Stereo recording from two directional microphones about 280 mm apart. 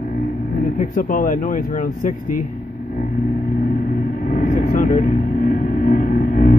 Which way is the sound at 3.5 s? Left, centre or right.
Left.